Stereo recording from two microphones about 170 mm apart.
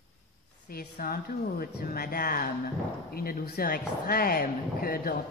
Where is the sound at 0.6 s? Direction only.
60° left (ahead or behind).